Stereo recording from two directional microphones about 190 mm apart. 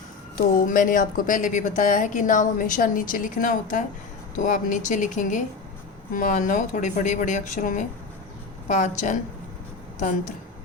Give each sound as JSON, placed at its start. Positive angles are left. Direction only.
{"t": 0.3, "sound": "a woman's voice", "side_deg": 45}